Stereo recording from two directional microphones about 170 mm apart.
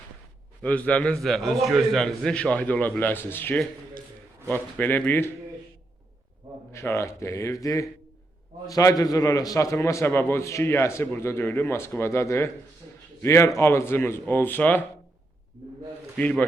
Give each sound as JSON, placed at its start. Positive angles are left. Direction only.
{"t": 0.6, "sound": "a man's voice", "side_deg": 10}
{"t": 6.7, "sound": "a man's voice", "side_deg": 15}
{"t": 16.1, "sound": "a man's voice", "side_deg": 5}